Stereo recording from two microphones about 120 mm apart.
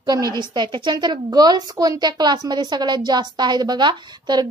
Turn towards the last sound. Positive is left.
turn(degrees=-35)  # may be behind; listen again after turning